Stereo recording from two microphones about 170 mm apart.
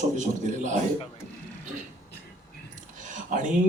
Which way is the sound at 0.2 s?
45° right (ahead or behind).